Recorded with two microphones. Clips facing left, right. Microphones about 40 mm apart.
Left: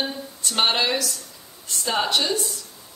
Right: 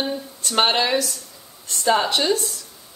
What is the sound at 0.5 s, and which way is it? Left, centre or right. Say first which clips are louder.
Speech: right 3 dB; centre.